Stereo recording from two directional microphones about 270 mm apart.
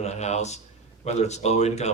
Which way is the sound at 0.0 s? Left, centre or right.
Left.